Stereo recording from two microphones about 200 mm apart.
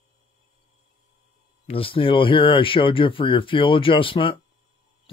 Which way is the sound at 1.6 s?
25° left (ahead or behind).